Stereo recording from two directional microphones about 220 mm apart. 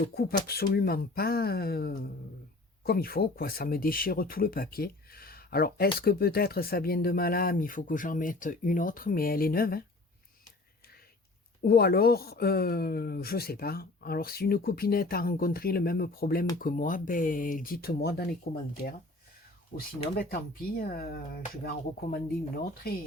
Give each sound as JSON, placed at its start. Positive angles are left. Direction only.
{"t": 0.1, "sound": "a woman's voice", "side_deg": 45}
{"t": 11.6, "sound": "a woman's voice", "side_deg": 45}